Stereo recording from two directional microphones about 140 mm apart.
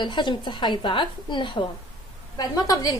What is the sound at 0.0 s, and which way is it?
A woman's voice, 35° left (ahead or behind).